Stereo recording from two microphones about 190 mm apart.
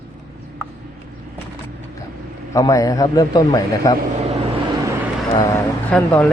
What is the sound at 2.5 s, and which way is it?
A man's voice, 20° left (ahead or behind).